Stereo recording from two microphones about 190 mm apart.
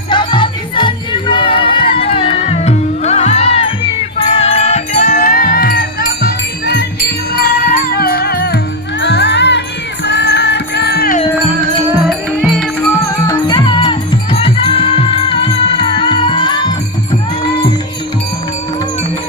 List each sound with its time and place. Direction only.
0.1 s music: 25° left (ahead or behind); by 6.8 s 55° left (ahead or behind)
7.9 s music: 55° left (ahead or behind)
12.4 s music: 5° left (ahead or behind)
13.1 s music: 20° left (ahead or behind)